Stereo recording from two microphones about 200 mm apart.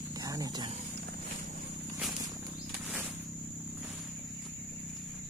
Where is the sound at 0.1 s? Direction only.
15° right (ahead or behind).